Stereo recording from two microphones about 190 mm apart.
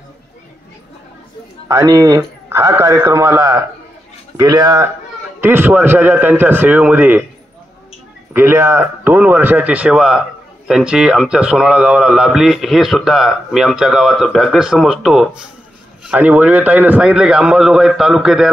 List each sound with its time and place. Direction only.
1.7 s a man's voice: 15° right (ahead or behind)
5.4 s a man's voice: 10° right (ahead or behind)
8.3 s a man's voice: 10° right (ahead or behind)